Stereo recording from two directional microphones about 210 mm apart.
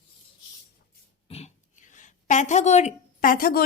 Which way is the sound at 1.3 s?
30° left (ahead or behind).